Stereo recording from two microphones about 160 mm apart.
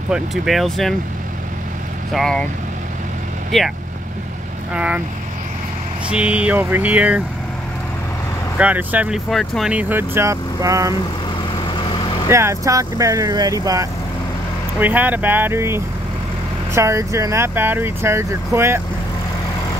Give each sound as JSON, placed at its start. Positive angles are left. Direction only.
{"t": 0.1, "sound": "speech", "side_deg": 0}
{"t": 2.1, "sound": "speech", "side_deg": 5}
{"t": 3.5, "sound": "speech", "side_deg": 0}
{"t": 4.7, "sound": "speech", "side_deg": -5}
{"t": 6.0, "sound": "speech", "side_deg": -5}
{"t": 8.5, "sound": "speech", "side_deg": -10}
{"t": 12.3, "sound": "speech", "side_deg": -15}